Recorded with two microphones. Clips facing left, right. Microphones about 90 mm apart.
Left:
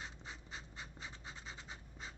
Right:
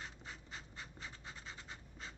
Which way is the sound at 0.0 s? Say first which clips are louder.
Even; 20° left (ahead or behind).